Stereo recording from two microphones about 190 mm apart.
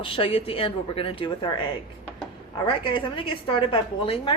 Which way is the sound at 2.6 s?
25° left (ahead or behind).